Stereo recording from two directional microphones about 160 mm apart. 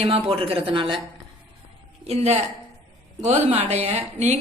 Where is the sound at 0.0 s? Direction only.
35° right (ahead or behind).